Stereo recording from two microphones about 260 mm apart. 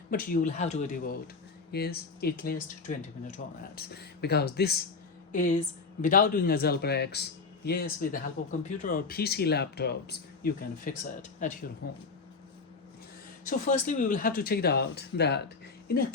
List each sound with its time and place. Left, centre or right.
0.1 s speech: left
13.4 s speech: left